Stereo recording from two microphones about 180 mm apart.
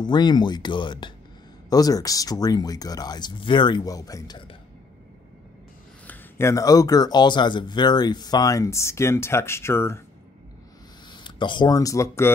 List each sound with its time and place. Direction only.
0.0 s speech: 25° left (ahead or behind)
6.0 s speech: 15° left (ahead or behind)
11.1 s speech: 25° left (ahead or behind)